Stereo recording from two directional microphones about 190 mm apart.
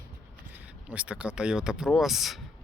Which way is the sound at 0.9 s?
5° right (ahead or behind).